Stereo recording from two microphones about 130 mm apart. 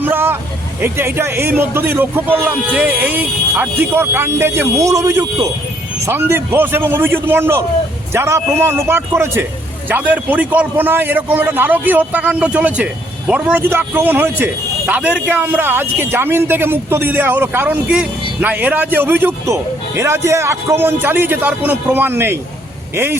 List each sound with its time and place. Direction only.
0.0 s vehicle: 15° right (ahead or behind)
0.8 s a man's voice: 20° right (ahead or behind)